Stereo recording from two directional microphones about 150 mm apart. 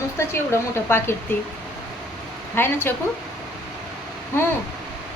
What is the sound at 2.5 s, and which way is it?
Speech, 15° left (ahead or behind).